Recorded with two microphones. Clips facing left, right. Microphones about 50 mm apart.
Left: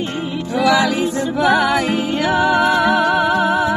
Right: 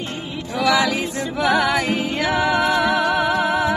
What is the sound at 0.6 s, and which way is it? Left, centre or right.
Music, centre.